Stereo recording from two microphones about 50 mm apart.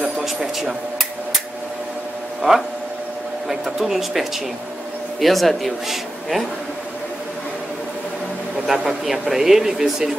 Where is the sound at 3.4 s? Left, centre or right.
Centre.